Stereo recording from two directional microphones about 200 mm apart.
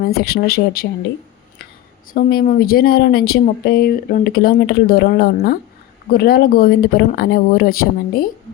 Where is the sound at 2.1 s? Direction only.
45° left (ahead or behind).